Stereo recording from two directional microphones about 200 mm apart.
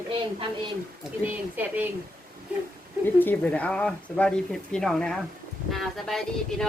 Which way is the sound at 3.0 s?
10° left (ahead or behind).